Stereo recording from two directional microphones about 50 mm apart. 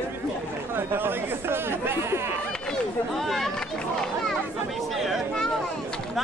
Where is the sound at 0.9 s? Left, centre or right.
Right.